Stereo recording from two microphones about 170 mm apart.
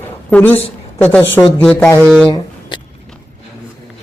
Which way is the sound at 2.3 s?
30° left (ahead or behind).